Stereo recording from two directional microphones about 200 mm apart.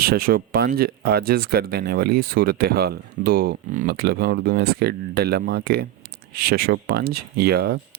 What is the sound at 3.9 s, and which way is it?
Speech, 55° right (ahead or behind).